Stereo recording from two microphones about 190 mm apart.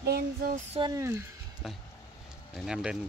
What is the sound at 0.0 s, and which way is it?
Female singing, 55° right (ahead or behind).